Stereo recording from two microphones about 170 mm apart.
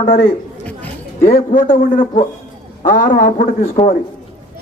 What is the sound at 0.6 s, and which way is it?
Chatter, 10° left (ahead or behind).